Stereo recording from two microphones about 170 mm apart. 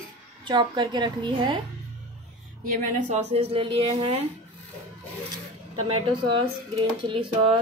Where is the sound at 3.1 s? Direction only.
35° right (ahead or behind).